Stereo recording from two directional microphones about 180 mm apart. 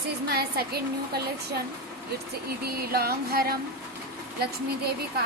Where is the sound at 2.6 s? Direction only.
60° right (ahead or behind).